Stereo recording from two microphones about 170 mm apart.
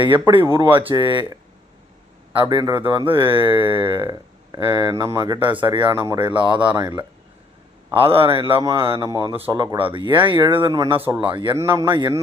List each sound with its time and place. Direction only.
0.0 s speech: 30° right (ahead or behind)
2.4 s a man's voice: 25° right (ahead or behind)